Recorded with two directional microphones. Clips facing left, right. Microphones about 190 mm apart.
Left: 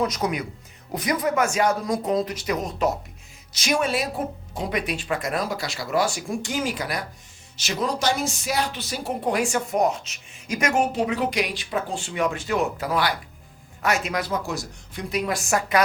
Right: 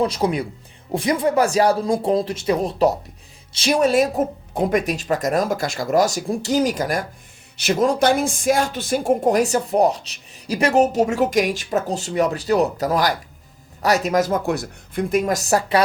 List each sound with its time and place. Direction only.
0.0 s speech: 30° right (ahead or behind)